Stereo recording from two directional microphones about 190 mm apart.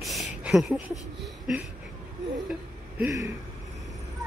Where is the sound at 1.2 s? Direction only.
Centre (ahead or behind).